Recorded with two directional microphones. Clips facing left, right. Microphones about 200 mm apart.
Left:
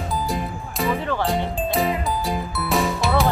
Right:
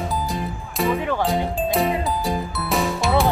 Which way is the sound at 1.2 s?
Centre (ahead or behind).